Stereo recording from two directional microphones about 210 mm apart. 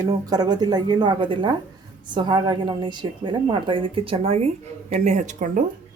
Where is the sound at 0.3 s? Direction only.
20° right (ahead or behind).